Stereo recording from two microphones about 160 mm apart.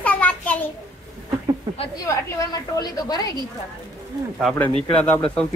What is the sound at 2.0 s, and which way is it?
A woman's voice, 20° left (ahead or behind).